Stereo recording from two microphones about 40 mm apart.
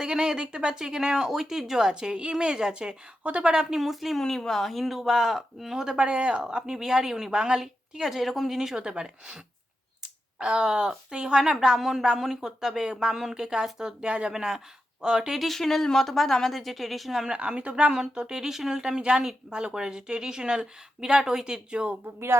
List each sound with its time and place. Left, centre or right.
0.0 s a woman's voice: centre
1.9 s a woman's voice: right
3.8 s a woman's voice: centre
4.2 s a woman's voice: centre
6.1 s a woman's voice: right
6.4 s a woman's voice: centre
11.8 s a woman's voice: centre
15.4 s a woman's voice: centre
17.3 s a woman's voice: right
22.0 s speech: right